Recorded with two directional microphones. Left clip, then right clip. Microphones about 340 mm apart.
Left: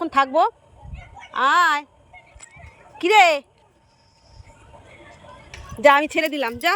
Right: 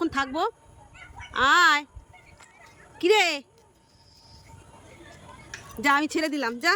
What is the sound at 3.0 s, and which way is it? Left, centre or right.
Speech, centre.